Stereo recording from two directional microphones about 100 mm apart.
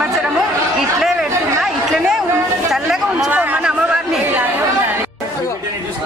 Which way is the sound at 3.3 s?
15° right (ahead or behind).